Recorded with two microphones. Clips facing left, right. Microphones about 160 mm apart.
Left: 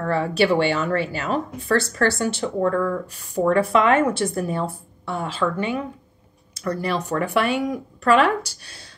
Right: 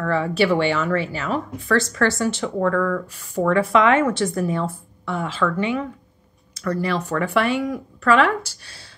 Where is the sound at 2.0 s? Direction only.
35° left (ahead or behind).